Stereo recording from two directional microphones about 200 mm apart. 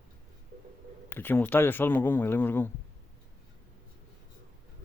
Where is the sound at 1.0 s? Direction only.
10° left (ahead or behind).